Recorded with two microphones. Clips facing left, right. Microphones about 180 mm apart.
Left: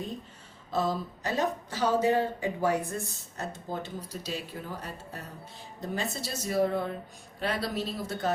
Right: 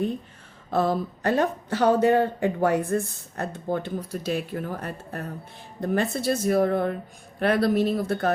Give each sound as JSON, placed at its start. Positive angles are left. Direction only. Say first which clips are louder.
{"t": 0.7, "sound": "speech", "louder": "right 6 dB", "side_deg": -60}